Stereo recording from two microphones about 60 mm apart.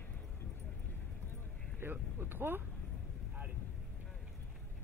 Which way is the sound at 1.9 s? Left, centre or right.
Right.